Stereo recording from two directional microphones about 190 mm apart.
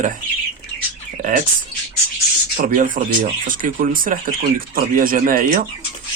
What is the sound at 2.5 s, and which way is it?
Speech, 45° right (ahead or behind).